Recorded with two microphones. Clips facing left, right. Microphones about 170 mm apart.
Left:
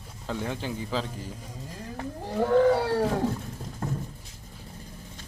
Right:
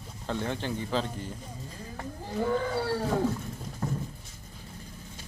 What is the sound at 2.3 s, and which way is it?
Whale vocalization, 70° left (ahead or behind).